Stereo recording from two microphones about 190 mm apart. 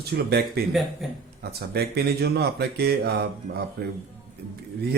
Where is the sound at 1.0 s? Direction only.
Centre (ahead or behind).